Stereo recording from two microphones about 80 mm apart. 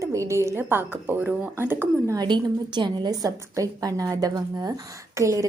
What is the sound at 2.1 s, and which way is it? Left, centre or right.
A woman's voice, right.